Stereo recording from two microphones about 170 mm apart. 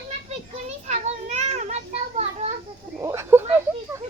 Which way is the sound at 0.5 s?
40° right (ahead or behind).